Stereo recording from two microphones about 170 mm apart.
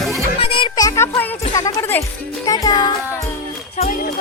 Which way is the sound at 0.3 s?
30° left (ahead or behind).